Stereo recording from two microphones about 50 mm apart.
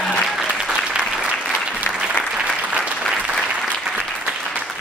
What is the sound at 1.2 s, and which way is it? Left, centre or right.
Applause, right.